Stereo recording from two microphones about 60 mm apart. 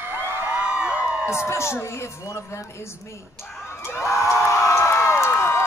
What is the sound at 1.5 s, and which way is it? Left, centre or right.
Speech, left.